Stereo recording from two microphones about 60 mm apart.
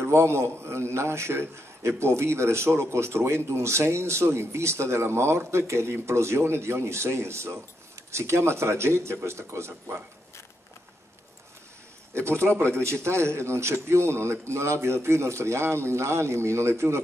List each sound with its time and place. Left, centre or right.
0.0 s a man's voice: right
12.1 s a sound: right
12.8 s a man's voice: right